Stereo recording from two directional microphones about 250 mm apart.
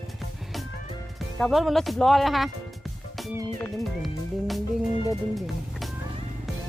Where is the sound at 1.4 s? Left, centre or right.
Centre.